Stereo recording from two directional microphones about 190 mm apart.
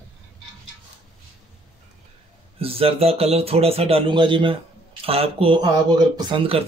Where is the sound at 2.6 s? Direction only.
30° right (ahead or behind).